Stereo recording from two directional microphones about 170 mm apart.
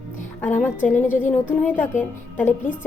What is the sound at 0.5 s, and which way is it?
A woman's voice, 10° left (ahead or behind).